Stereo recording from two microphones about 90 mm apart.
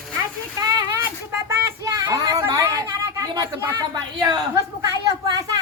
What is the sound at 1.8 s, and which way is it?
Child singing, 35° right (ahead or behind).